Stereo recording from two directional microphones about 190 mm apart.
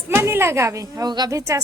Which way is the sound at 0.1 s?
10° right (ahead or behind).